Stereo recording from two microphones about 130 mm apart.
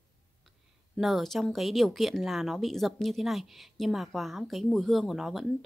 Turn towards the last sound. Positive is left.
turn(degrees=0)  # may be behind; listen again after turning